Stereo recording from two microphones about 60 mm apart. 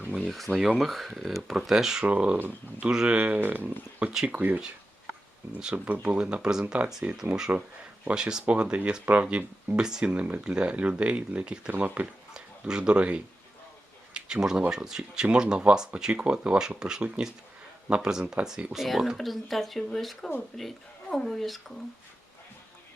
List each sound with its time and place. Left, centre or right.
0.3 s speech: centre
2.0 s speech: right
3.2 s speech: right
5.7 s speech: right
7.0 s speech: right
8.1 s speech: centre
12.3 s speech: centre
14.1 s a sound: centre
14.7 s speech: centre